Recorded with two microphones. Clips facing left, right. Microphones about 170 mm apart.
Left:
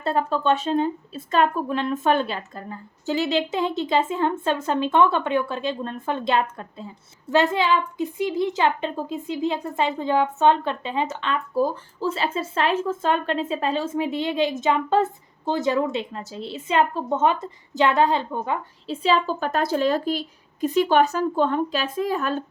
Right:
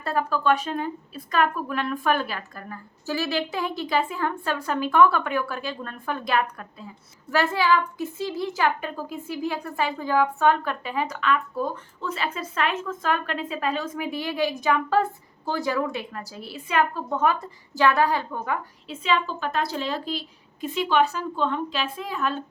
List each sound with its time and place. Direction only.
0.0 s speech: 25° left (ahead or behind)
19.0 s a woman's voice: 40° left (ahead or behind)